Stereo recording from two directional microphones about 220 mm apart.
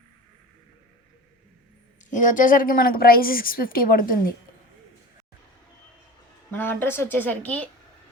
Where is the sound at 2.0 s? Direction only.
35° left (ahead or behind).